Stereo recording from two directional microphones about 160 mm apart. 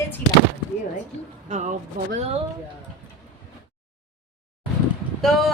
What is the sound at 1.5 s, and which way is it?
Speech, 50° right (ahead or behind).